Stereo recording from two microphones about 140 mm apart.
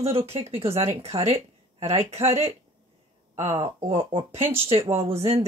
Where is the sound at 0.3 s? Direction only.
45° right (ahead or behind).